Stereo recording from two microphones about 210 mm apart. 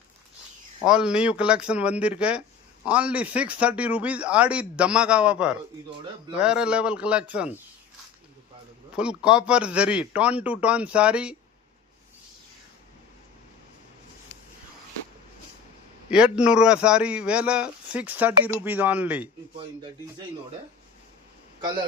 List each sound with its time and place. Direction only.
0.9 s a man's voice: 5° right (ahead or behind)
9.0 s a man's voice: 5° right (ahead or behind)
16.0 s a man's voice: 5° right (ahead or behind)
19.5 s speech: 20° right (ahead or behind)